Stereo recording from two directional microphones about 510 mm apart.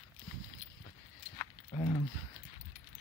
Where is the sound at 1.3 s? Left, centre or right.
Centre.